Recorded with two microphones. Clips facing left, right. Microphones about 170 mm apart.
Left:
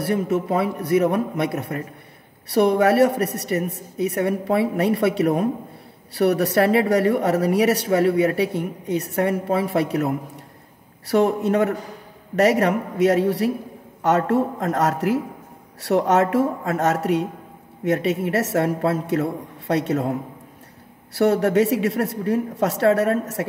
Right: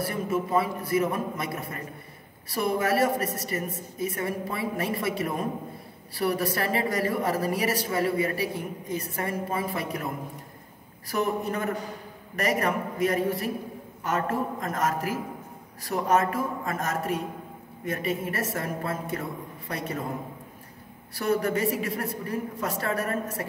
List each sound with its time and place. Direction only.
0.0 s speech: 70° left (ahead or behind)